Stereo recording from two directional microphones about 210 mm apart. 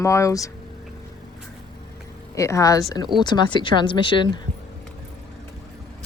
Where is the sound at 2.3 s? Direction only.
15° left (ahead or behind).